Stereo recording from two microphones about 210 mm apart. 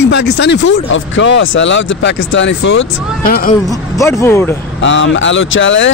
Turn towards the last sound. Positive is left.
turn(degrees=60)  # may be behind; listen again after turning